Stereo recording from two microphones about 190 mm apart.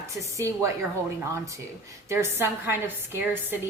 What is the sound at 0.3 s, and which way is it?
A woman's voice, 15° right (ahead or behind).